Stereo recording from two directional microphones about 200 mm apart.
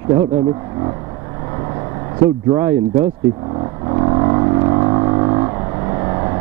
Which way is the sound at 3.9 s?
20° right (ahead or behind).